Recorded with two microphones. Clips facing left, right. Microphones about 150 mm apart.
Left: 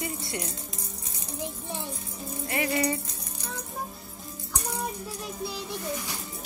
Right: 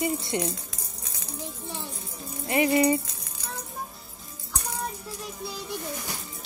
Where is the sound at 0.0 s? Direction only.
20° right (ahead or behind).